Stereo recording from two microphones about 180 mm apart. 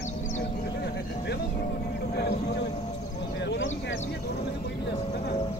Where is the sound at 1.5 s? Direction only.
45° left (ahead or behind).